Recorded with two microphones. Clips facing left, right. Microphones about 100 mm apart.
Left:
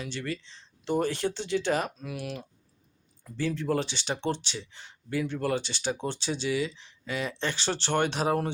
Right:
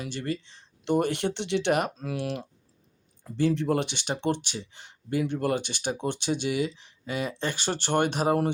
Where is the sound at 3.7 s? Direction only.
55° right (ahead or behind).